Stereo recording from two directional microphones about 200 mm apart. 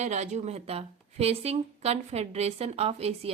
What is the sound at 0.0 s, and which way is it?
A woman's voice, 35° right (ahead or behind).